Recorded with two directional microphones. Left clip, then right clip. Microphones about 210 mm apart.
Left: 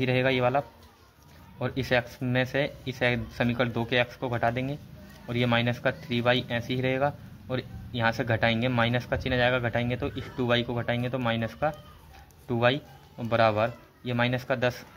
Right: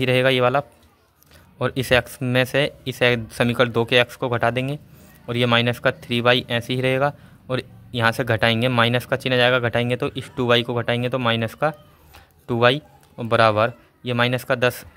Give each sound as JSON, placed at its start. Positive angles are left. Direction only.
{"t": 0.0, "sound": "a man's voice", "side_deg": -40}